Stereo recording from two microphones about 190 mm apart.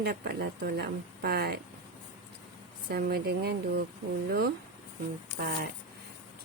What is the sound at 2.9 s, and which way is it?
Speech, 55° right (ahead or behind).